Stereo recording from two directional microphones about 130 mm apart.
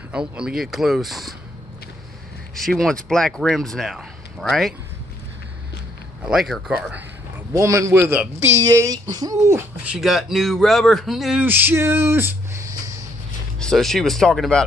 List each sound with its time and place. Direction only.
0.1 s speech: 5° right (ahead or behind)
2.5 s speech: 5° left (ahead or behind)
6.2 s speech: centre (ahead or behind)
7.5 s speech: 25° right (ahead or behind)
9.8 s speech: 5° right (ahead or behind)
11.4 s speech: 15° right (ahead or behind)
13.6 s speech: 5° left (ahead or behind)